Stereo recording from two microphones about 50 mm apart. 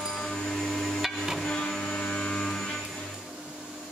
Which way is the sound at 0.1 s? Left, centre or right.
Centre.